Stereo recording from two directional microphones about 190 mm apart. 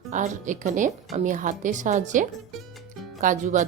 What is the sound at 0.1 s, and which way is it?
Speech, 40° right (ahead or behind).